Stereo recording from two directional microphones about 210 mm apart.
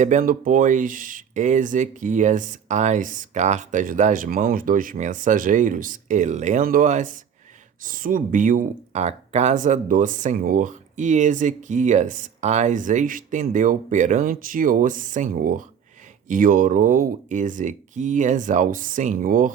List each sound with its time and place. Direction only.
0.0 s speech: 35° right (ahead or behind)